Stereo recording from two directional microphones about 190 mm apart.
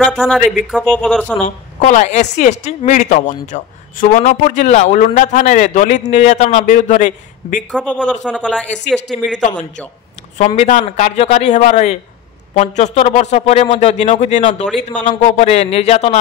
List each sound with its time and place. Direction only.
0.0 s speech: centre (ahead or behind)
1.8 s speech: 40° left (ahead or behind)
7.8 s speech: 5° left (ahead or behind)
10.3 s speech: 40° left (ahead or behind)